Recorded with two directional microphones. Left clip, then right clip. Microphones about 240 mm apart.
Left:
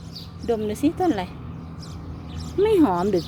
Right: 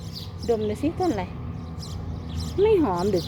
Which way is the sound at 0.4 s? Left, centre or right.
Centre.